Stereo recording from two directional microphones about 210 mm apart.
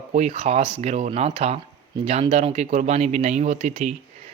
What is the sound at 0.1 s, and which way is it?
Speech, 30° right (ahead or behind).